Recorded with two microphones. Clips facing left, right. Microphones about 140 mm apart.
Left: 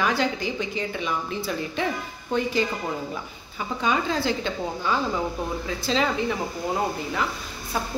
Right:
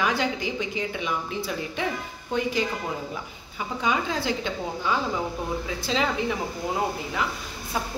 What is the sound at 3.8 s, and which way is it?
A woman's voice, 10° right (ahead or behind).